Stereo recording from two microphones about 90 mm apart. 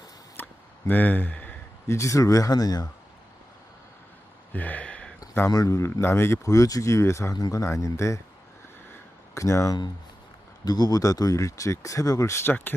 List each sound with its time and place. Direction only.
0.4 s a sound: 25° left (ahead or behind)
0.9 s speech: 20° left (ahead or behind)
1.9 s speech: 35° left (ahead or behind)
4.5 s a sound: 20° left (ahead or behind)
5.5 s speech: 40° left (ahead or behind)
9.3 s speech: 35° left (ahead or behind)
10.7 s speech: 50° left (ahead or behind)